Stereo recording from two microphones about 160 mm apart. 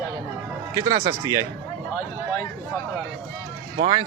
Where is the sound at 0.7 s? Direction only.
20° right (ahead or behind).